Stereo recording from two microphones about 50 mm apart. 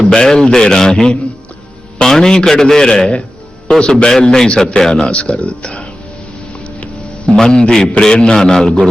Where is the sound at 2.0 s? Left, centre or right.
Centre.